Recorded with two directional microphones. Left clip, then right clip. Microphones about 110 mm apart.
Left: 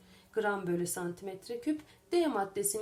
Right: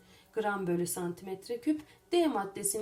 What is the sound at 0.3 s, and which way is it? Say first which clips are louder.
A woman's voice: even; 30° left (ahead or behind).